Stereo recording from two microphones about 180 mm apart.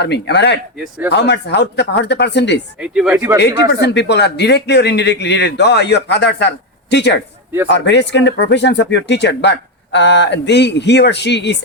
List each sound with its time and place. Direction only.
0.0 s speech: 70° left (ahead or behind)
2.8 s speech: 5° right (ahead or behind)
3.6 s speech: 70° left (ahead or behind)